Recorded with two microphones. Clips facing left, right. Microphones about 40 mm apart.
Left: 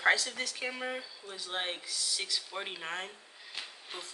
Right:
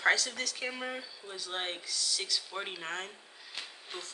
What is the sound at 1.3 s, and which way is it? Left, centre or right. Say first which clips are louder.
Speech: left 1 dB; centre.